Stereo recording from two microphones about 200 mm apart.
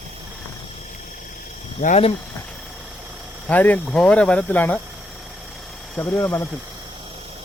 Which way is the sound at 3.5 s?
5° left (ahead or behind).